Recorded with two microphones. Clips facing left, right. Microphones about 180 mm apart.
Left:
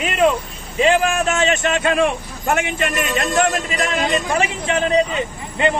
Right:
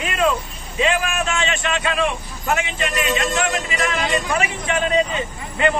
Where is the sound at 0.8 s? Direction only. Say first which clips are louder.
Left 5 dB; 35° left (ahead or behind).